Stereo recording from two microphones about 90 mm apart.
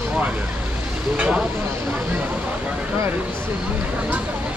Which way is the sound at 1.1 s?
10° right (ahead or behind).